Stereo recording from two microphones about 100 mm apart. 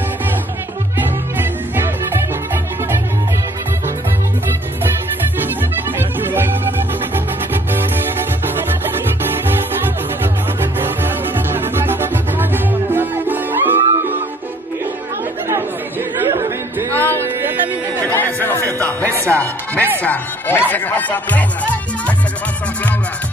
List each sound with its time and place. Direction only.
0.9 s music: 20° right (ahead or behind)
5.9 s music: 20° right (ahead or behind)
10.2 s music: 20° right (ahead or behind)
16.3 s a sound: 25° right (ahead or behind)
18.0 s music: 20° left (ahead or behind)